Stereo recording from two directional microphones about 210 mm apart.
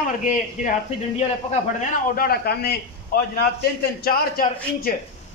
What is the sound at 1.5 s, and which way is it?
A man's voice, 40° left (ahead or behind).